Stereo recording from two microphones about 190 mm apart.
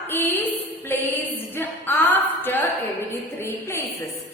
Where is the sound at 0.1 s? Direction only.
15° left (ahead or behind).